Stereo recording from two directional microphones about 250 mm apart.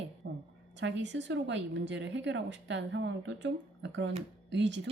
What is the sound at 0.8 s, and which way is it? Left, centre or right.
Speech, right.